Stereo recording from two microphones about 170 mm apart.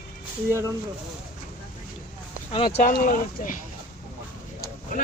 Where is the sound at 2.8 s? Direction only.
50° left (ahead or behind).